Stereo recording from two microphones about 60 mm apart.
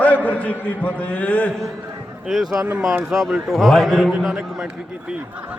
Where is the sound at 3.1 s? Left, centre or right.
Centre.